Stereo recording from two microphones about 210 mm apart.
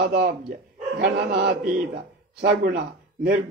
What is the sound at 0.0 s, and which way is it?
A man's voice, 55° right (ahead or behind).